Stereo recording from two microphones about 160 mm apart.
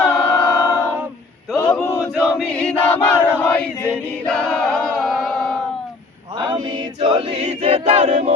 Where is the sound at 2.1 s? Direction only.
5° left (ahead or behind).